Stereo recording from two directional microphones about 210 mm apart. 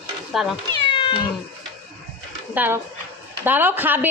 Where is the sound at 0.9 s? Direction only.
25° left (ahead or behind).